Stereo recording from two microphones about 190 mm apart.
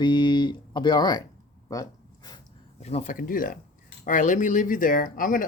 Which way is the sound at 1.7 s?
20° left (ahead or behind).